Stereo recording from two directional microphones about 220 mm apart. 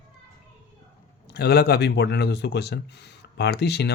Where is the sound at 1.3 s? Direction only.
45° left (ahead or behind).